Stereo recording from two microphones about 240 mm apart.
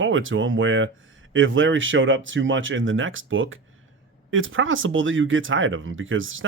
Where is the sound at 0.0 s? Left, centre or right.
Right.